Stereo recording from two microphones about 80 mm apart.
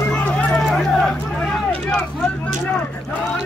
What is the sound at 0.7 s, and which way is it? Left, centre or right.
Vehicle, centre.